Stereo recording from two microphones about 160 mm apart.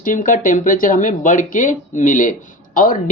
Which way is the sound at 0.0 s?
55° left (ahead or behind).